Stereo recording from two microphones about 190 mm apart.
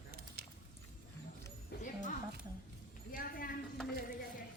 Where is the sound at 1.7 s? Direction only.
55° left (ahead or behind).